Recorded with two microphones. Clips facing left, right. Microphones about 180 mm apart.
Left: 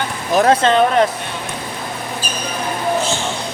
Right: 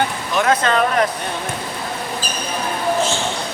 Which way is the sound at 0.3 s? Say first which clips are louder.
Left 4 dB; 30° left (ahead or behind).